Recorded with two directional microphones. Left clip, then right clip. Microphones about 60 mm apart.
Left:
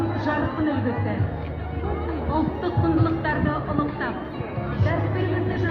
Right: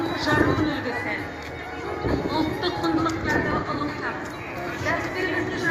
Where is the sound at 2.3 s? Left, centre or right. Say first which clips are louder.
Even; right.